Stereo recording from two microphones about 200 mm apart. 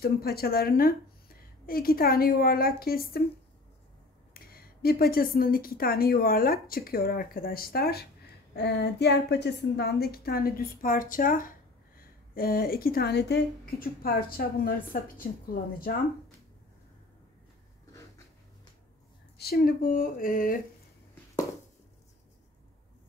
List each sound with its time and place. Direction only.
0.0 s speech: 50° left (ahead or behind)
4.3 s speech: 50° left (ahead or behind)
19.3 s speech: 50° left (ahead or behind)